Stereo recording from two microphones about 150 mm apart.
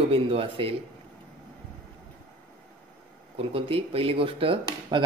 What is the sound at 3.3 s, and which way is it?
Speech, 40° right (ahead or behind).